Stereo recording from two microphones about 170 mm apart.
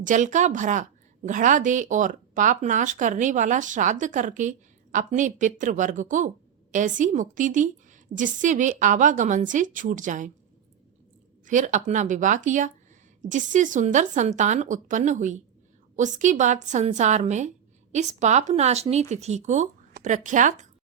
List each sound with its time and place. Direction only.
0.0 s a woman's voice: 50° right (ahead or behind)
11.4 s a woman's voice: 50° right (ahead or behind)